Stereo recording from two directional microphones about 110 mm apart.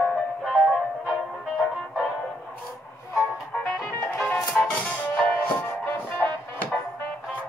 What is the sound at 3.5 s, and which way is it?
Music, 5° left (ahead or behind).